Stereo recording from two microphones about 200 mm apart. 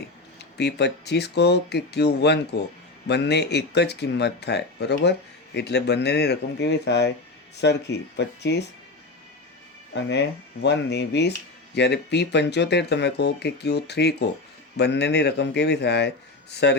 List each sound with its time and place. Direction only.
0.5 s speech: 55° left (ahead or behind)
9.9 s speech: 60° left (ahead or behind)